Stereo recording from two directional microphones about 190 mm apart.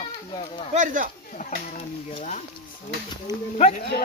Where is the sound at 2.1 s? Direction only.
35° left (ahead or behind).